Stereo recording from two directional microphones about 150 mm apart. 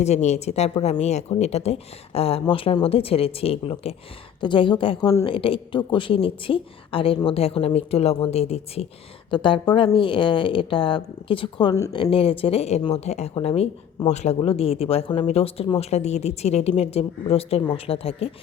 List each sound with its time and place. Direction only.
0.0 s speech: 50° left (ahead or behind)
9.3 s speech: 35° left (ahead or behind)